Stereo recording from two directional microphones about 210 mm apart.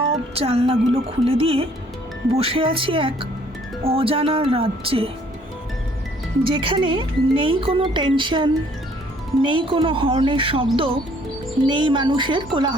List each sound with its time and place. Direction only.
0.3 s speech: 25° right (ahead or behind)
6.4 s speech: 25° right (ahead or behind)